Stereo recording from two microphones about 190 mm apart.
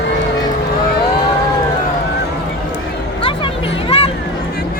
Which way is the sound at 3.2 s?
30° left (ahead or behind).